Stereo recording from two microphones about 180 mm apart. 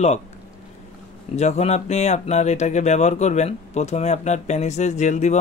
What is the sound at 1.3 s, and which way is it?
Speech, 35° left (ahead or behind).